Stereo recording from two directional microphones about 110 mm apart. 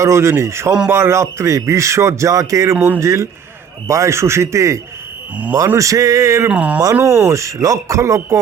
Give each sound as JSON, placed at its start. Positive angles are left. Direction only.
{"t": 0.0, "sound": "speech", "side_deg": -25}
{"t": 2.7, "sound": "speech", "side_deg": -15}
{"t": 3.0, "sound": "speech", "side_deg": -30}
{"t": 6.5, "sound": "speech", "side_deg": -10}
{"t": 7.0, "sound": "speech", "side_deg": -25}